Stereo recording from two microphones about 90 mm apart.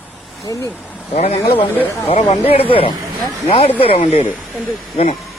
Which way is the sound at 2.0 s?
90° left.